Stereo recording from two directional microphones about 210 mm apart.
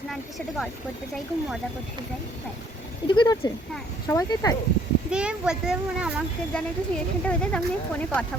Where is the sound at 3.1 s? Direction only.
20° left (ahead or behind).